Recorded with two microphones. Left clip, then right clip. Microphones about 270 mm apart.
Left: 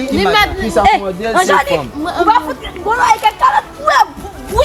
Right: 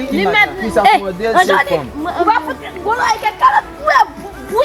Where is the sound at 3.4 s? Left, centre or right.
Centre.